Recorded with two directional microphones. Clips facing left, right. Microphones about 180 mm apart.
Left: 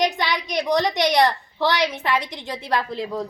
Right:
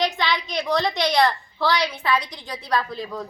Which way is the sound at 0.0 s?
15° left (ahead or behind).